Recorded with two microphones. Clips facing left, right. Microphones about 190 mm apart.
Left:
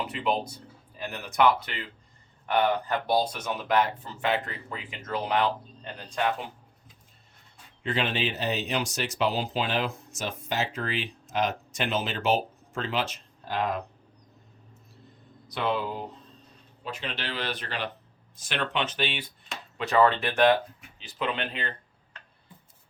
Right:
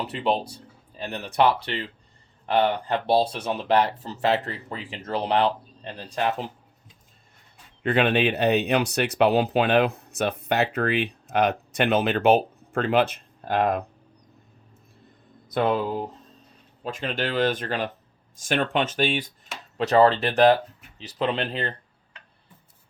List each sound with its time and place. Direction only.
0.1 s speech: 30° right (ahead or behind)
7.9 s speech: 60° right (ahead or behind)
15.4 s speech: 50° right (ahead or behind)